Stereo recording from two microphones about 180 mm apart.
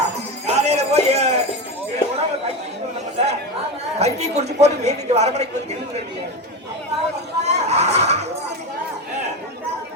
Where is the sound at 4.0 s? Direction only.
35° right (ahead or behind).